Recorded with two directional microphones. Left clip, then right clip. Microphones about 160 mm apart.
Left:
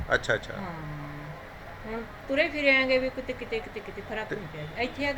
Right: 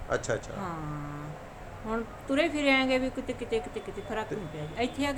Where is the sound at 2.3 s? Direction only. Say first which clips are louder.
Left 2 dB; 25° right (ahead or behind).